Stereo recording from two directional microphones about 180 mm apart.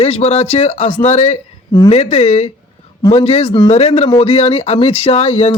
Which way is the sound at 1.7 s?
20° left (ahead or behind).